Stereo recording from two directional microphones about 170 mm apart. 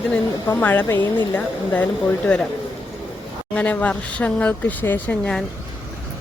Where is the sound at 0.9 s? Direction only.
25° left (ahead or behind).